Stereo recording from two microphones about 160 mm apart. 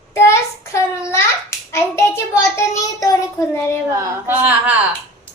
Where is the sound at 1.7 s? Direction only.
15° left (ahead or behind).